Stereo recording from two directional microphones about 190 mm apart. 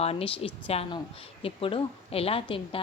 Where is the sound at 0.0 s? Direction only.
30° left (ahead or behind).